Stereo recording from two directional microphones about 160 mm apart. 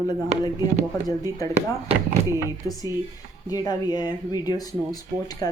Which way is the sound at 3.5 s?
25° left (ahead or behind).